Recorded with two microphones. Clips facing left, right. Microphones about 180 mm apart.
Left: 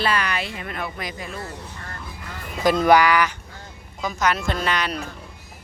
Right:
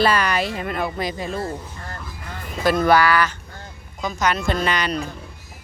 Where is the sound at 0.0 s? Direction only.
40° right (ahead or behind).